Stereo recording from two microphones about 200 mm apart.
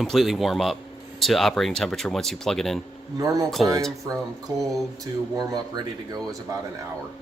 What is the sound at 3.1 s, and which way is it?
Speech, 15° right (ahead or behind).